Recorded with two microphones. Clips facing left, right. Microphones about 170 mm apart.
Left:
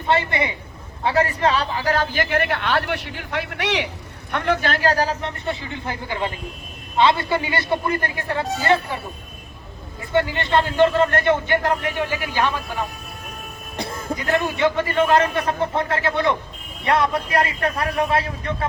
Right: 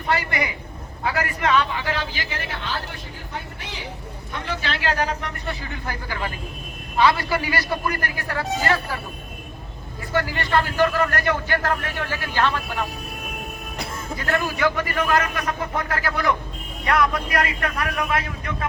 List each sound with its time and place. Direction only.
0.1 s a man's voice: 25° left (ahead or behind); by 3.8 s 80° left
4.3 s a man's voice: 60° left (ahead or behind); by 9.0 s 25° left (ahead or behind)
10.1 s speech: 20° left (ahead or behind)